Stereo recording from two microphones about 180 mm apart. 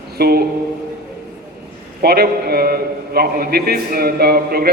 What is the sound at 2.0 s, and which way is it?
A man's voice, 60° right (ahead or behind).